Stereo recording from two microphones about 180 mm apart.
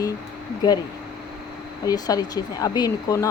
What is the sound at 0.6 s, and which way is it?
Speech, 25° left (ahead or behind).